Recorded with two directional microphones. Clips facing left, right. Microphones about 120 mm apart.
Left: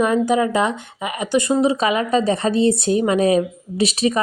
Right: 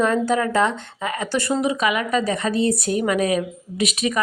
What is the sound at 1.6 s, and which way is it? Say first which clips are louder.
Speech: left 3 dB; 30° left (ahead or behind).